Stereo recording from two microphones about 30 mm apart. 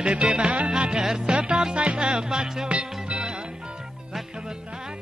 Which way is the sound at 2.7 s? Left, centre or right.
Right.